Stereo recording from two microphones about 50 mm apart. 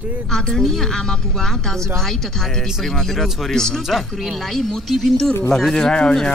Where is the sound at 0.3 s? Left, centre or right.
Centre.